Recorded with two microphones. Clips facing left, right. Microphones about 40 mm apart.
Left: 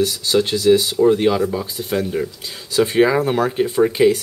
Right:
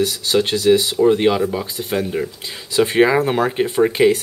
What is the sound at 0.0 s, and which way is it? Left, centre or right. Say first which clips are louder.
Speech: even; centre.